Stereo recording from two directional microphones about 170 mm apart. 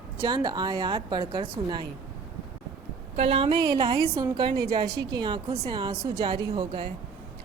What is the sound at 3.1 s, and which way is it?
A woman's voice, 40° right (ahead or behind).